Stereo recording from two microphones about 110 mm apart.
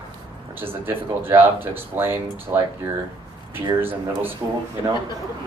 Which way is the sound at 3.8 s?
20° right (ahead or behind).